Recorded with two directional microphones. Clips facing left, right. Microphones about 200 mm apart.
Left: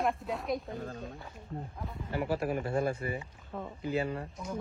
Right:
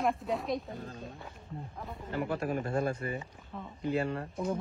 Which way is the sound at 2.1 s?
10° left (ahead or behind).